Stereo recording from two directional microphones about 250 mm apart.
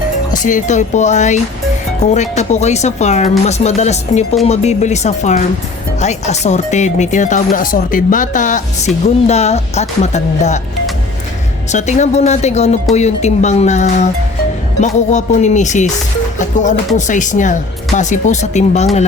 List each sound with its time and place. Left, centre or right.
0.4 s speech: left
11.7 s speech: left